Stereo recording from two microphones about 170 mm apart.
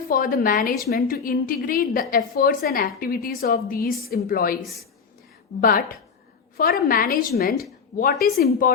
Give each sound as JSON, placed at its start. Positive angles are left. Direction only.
{"t": 0.1, "sound": "a woman's voice", "side_deg": 60}
{"t": 4.6, "sound": "a woman's voice", "side_deg": 0}
{"t": 5.5, "sound": "a woman's voice", "side_deg": 55}